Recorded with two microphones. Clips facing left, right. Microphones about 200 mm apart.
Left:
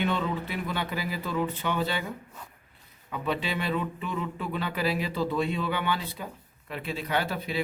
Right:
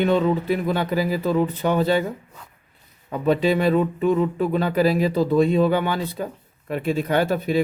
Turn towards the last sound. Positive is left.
turn(degrees=-45)  # may be behind; listen again after turning